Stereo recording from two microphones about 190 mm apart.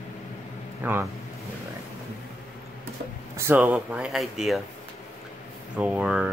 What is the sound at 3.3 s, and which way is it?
Speech, 10° right (ahead or behind).